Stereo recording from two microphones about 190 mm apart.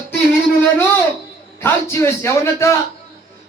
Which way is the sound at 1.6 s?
15° left (ahead or behind).